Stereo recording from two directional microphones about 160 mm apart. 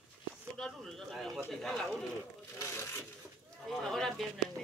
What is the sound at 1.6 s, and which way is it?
Speech, centre (ahead or behind).